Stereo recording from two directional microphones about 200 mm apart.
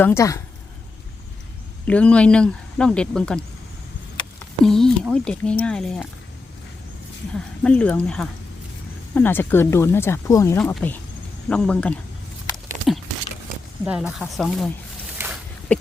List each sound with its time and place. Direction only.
0.0 s speech: 15° left (ahead or behind)
1.9 s speech: 5° left (ahead or behind)
4.6 s speech: centre (ahead or behind)
7.3 s speech: 5° left (ahead or behind)
12.9 s a sound: centre (ahead or behind)
13.8 s speech: 5° right (ahead or behind)
15.2 s a sound: 10° right (ahead or behind)
15.7 s speech: 5° left (ahead or behind)